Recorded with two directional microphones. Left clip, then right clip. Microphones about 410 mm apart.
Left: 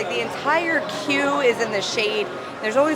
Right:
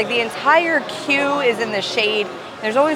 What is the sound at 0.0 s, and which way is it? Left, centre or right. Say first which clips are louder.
Speech: right 5 dB; right.